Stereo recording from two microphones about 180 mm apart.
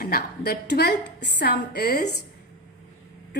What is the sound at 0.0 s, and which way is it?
A woman's voice, 55° left (ahead or behind).